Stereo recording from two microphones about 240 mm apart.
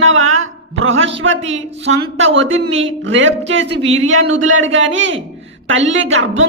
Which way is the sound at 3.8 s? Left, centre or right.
Right.